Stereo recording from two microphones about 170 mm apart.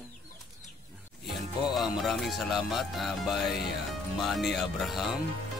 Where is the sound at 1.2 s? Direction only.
Centre (ahead or behind).